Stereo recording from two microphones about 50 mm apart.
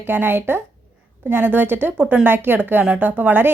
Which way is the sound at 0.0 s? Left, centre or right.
Right.